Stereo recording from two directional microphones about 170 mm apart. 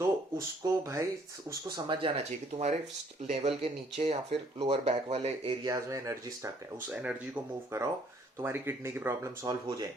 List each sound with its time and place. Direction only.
0.0 s speech: 15° right (ahead or behind)
1.7 s speech: 30° right (ahead or behind)
3.2 s speech: 40° right (ahead or behind)
5.6 s speech: 20° right (ahead or behind)
6.9 s speech: 5° right (ahead or behind)